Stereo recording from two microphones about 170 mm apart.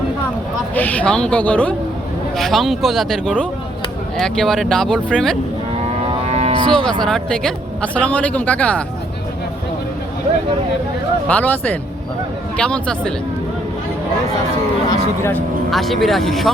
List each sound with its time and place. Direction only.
0.8 s speech: 10° left (ahead or behind)
6.1 s a sound: 40° right (ahead or behind)
6.7 s speech: 5° left (ahead or behind)
11.3 s speech: 10° left (ahead or behind)
14.8 s speech: 15° left (ahead or behind)